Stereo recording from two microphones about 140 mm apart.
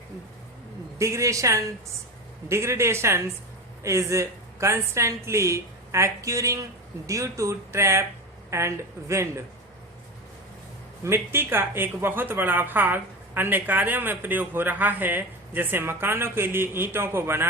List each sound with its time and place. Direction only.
0.9 s a woman's voice: 20° right (ahead or behind)
11.0 s a woman's voice: 15° right (ahead or behind)